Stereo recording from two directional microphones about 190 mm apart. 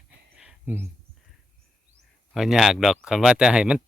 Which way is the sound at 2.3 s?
Centre (ahead or behind).